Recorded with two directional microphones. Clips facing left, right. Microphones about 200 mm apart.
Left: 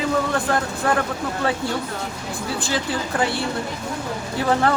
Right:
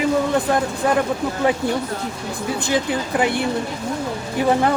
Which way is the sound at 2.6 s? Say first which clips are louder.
Right 5 dB; 20° right (ahead or behind).